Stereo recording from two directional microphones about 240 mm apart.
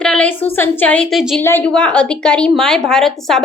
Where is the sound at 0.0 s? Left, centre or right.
Centre.